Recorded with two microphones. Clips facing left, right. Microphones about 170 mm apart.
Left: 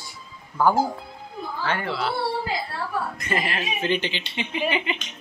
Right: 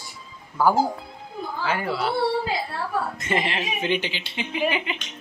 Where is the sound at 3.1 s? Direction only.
25° right (ahead or behind).